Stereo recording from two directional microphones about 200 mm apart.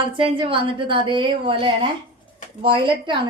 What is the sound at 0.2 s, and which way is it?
A woman's voice, 25° right (ahead or behind).